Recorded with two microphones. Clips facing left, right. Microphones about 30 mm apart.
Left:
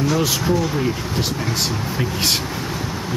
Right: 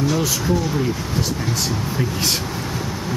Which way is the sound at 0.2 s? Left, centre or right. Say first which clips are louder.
Left 1 dB; left.